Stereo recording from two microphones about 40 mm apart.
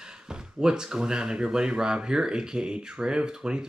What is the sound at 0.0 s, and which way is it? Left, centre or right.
Speech, centre.